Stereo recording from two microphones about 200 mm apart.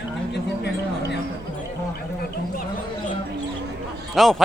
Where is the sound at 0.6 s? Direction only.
55° left (ahead or behind).